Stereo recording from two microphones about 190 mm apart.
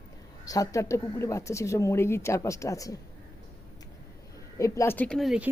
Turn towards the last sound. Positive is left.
turn(degrees=0)  # may be behind; listen again after turning